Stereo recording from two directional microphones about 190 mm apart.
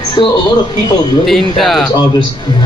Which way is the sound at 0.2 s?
25° left (ahead or behind).